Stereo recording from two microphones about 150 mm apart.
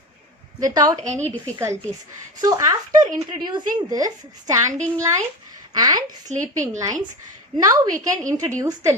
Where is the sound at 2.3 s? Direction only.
25° right (ahead or behind).